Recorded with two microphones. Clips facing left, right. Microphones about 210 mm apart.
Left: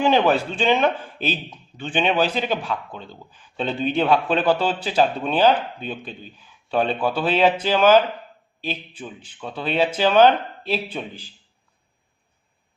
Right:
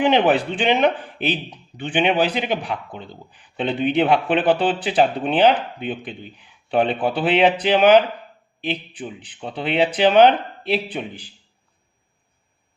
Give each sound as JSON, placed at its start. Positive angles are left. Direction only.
{"t": 0.0, "sound": "speech", "side_deg": -15}